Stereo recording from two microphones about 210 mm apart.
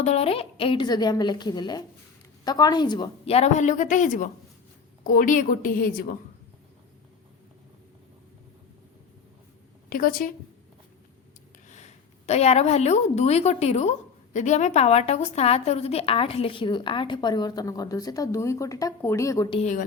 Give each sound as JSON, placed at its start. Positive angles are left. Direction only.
{"t": 0.0, "sound": "a woman's voice", "side_deg": 30}
{"t": 9.9, "sound": "a woman's voice", "side_deg": 40}
{"t": 11.7, "sound": "a woman's voice", "side_deg": 35}
{"t": 19.5, "sound": "a woman's voice", "side_deg": 35}